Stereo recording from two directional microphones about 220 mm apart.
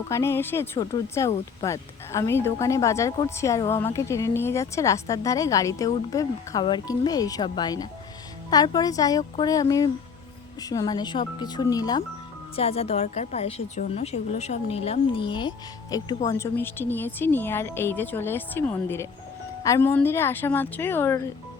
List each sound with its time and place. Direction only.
0.1 s a woman's voice: 10° left (ahead or behind)
12.5 s a woman's voice: 25° left (ahead or behind); by 21.2 s 10° left (ahead or behind)